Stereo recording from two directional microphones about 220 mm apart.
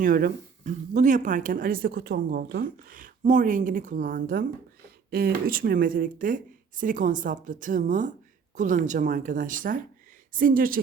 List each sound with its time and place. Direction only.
0.0 s speech: 40° right (ahead or behind)